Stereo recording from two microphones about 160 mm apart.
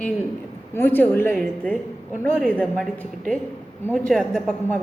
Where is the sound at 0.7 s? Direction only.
15° left (ahead or behind).